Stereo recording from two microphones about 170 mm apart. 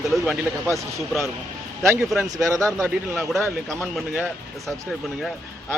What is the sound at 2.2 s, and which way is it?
Speech, 20° right (ahead or behind).